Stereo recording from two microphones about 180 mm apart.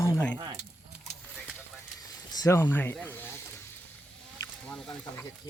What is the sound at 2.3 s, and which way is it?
Speech, 20° left (ahead or behind).